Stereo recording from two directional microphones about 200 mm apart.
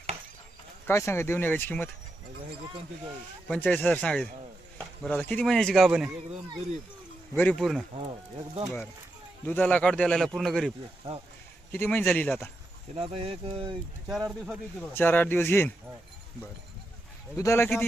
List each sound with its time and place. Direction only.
0.9 s speech: 10° left (ahead or behind)
3.5 s a man's voice: 10° left (ahead or behind)
7.3 s a man's voice: 5° left (ahead or behind)
7.9 s speech: 25° right (ahead or behind)
9.5 s a man's voice: 5° left (ahead or behind)
11.1 s speech: 25° right (ahead or behind)
11.7 s speech: 10° left (ahead or behind)
13.0 s speech: 30° right (ahead or behind)
14.1 s a man's voice: 5° right (ahead or behind)
14.9 s speech: 10° left (ahead or behind)
17.3 s speech: 15° left (ahead or behind)